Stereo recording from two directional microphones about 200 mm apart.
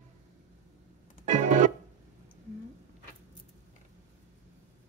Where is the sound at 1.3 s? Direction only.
35° right (ahead or behind).